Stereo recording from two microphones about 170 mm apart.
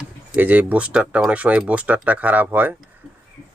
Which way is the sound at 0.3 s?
10° right (ahead or behind).